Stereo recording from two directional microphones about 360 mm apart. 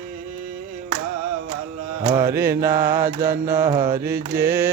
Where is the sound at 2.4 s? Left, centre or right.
Right.